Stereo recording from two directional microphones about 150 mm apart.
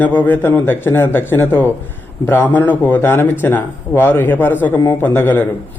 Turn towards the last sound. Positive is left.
turn(degrees=15)  # may be behind; listen again after turning